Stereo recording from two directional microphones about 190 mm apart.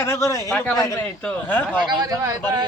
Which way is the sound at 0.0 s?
15° left (ahead or behind).